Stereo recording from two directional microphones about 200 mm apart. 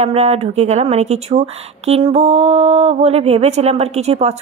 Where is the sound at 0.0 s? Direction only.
30° right (ahead or behind).